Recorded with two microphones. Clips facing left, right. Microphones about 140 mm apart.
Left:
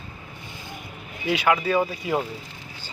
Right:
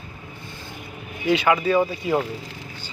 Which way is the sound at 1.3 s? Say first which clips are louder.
Right 3 dB; 5° left (ahead or behind).